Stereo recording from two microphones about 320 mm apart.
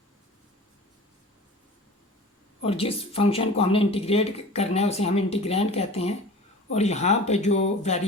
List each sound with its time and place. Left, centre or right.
2.6 s speech: centre